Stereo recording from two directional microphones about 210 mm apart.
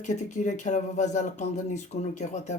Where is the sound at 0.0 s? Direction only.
35° left (ahead or behind).